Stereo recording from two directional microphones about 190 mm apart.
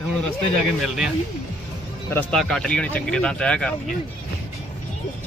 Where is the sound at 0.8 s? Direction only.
Centre (ahead or behind).